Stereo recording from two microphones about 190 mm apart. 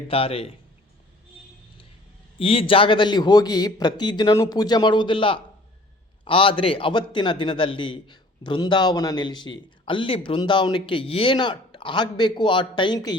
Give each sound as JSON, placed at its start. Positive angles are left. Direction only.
{"t": 0.1, "sound": "a man's voice", "side_deg": 30}
{"t": 2.4, "sound": "a man's voice", "side_deg": 30}